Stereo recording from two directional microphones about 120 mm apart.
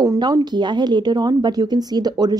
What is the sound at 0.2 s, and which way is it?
Speech, 35° right (ahead or behind).